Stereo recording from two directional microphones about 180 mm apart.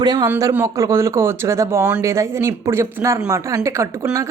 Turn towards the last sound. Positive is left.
turn(degrees=-15)  # may be behind; listen again after turning